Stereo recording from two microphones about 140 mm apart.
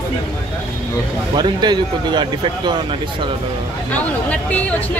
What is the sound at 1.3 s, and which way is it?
Speech, 30° right (ahead or behind).